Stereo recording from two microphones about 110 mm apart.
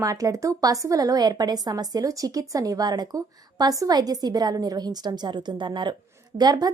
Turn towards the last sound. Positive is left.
turn(degrees=-35)  # may be behind; listen again after turning